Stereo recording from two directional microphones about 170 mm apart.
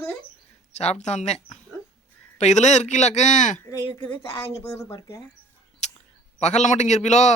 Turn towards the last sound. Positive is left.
turn(degrees=45)  # may be behind; listen again after turning